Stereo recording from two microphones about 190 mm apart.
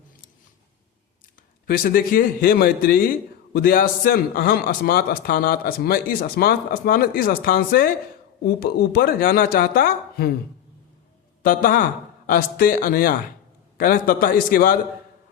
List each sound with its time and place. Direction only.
1.6 s a man's voice: 50° left (ahead or behind)
11.4 s a man's voice: 45° left (ahead or behind)